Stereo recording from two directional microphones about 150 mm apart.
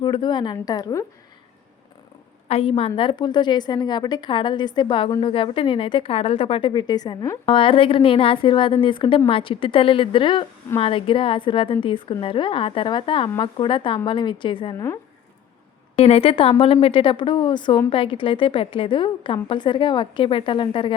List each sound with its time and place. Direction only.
0.0 s a woman's voice: 30° left (ahead or behind)
2.5 s a woman's voice: 40° left (ahead or behind)
16.0 s speech: 40° left (ahead or behind)